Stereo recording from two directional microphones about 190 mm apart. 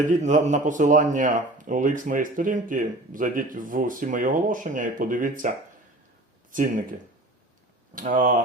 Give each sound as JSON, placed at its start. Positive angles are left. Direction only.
{"t": 0.1, "sound": "speech", "side_deg": -40}
{"t": 7.9, "sound": "speech", "side_deg": -45}